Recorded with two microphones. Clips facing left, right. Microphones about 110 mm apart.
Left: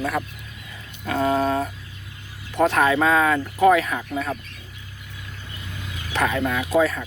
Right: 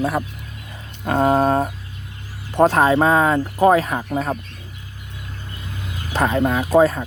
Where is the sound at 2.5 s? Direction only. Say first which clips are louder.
Right 4 dB; 35° right (ahead or behind).